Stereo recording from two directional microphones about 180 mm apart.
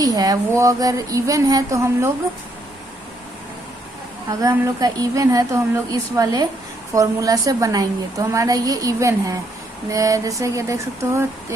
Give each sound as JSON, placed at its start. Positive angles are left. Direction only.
{"t": 0.0, "sound": "a woman's voice", "side_deg": -20}
{"t": 4.3, "sound": "a woman's voice", "side_deg": -15}
{"t": 9.9, "sound": "a sound", "side_deg": -20}